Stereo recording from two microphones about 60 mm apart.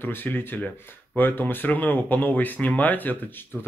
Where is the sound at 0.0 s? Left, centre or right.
Left.